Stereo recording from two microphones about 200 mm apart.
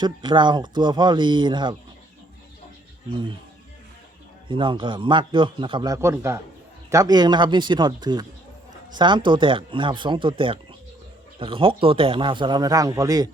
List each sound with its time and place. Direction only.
0.0 s speech: 25° right (ahead or behind)
4.4 s speech: 25° right (ahead or behind)